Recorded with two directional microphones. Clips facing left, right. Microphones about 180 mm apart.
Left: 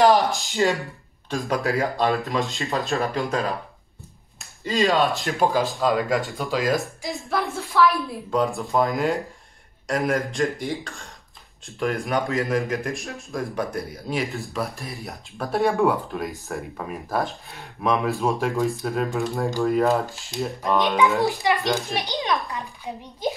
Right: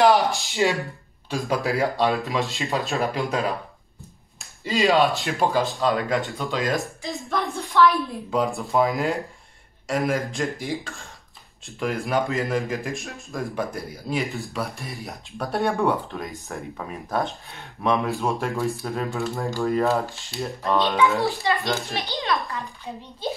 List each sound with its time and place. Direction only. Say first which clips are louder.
0.0 s a sound: left 1 dB; centre (ahead or behind)
0.6 s a man's voice: even; 10° right (ahead or behind)
4.6 s a man's voice: right 1 dB; centre (ahead or behind)
20.6 s a child's voice: even; 15° left (ahead or behind)